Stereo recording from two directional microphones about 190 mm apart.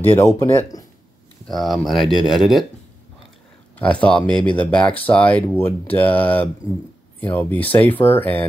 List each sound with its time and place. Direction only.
0.1 s speech: 15° left (ahead or behind)
1.5 s speech: centre (ahead or behind)
3.7 s speech: 5° left (ahead or behind)